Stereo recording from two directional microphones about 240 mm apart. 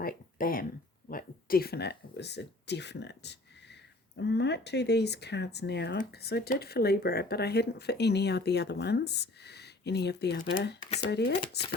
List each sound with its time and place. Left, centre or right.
0.0 s speech: left
10.8 s speech: left
11.1 s speech: left